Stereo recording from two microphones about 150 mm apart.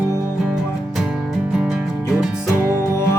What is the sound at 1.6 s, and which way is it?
Music, 5° right (ahead or behind).